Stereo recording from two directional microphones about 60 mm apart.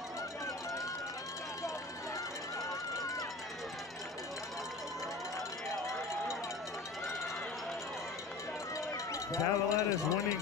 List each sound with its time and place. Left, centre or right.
8.9 s speech: left